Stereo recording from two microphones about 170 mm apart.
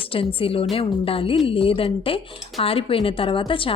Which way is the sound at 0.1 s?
30° left (ahead or behind).